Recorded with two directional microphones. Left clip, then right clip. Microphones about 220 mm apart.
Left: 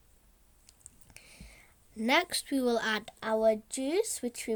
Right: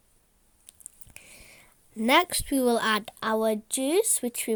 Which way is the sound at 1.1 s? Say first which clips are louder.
Right 4 dB; 30° right (ahead or behind).